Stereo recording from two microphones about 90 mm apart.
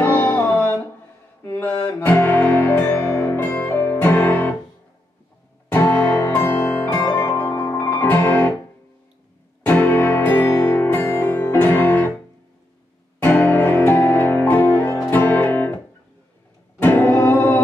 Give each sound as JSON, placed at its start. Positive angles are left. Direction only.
{"t": 0.0, "sound": "music", "side_deg": 20}
{"t": 1.4, "sound": "mantra", "side_deg": 20}
{"t": 1.9, "sound": "music", "side_deg": 20}
{"t": 5.7, "sound": "music", "side_deg": 20}
{"t": 9.7, "sound": "music", "side_deg": 20}
{"t": 13.2, "sound": "music", "side_deg": 25}
{"t": 16.8, "sound": "music", "side_deg": 20}